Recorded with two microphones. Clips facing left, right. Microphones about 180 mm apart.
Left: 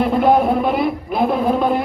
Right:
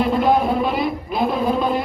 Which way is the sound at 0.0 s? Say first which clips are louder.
Left 3 dB; 55° left (ahead or behind).